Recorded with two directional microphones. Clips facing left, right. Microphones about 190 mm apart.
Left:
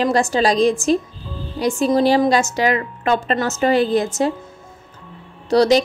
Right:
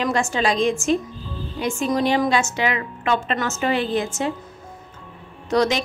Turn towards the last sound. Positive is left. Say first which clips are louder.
# left 6 dB
turn(degrees=35)  # may be behind; listen again after turning